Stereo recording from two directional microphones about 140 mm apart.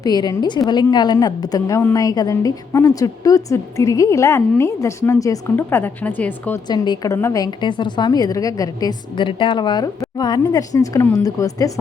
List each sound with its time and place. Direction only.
0.0 s a woman's voice: 30° left (ahead or behind); by 6.6 s 10° left (ahead or behind)
6.7 s a woman's voice: 30° left (ahead or behind)